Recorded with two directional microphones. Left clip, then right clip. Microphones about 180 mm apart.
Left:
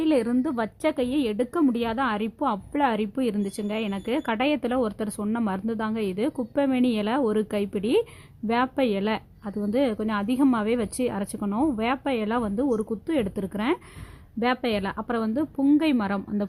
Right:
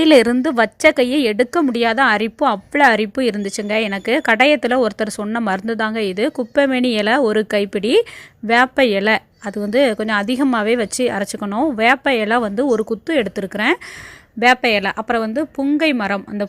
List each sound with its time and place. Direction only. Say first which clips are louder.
0.0 s a woman's voice: right 12 dB; 35° right (ahead or behind); by 16.5 s 15° right (ahead or behind)